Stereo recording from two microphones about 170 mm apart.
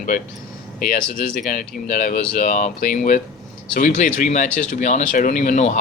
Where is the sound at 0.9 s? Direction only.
55° left (ahead or behind).